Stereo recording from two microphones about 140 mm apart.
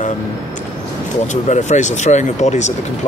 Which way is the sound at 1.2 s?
60° left (ahead or behind).